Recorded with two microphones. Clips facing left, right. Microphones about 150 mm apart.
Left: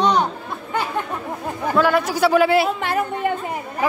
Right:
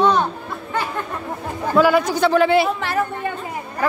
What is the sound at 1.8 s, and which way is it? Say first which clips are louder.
Speech: right 2 dB; centre (ahead or behind).